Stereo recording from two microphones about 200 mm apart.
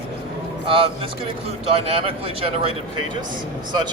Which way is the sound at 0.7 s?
25° right (ahead or behind).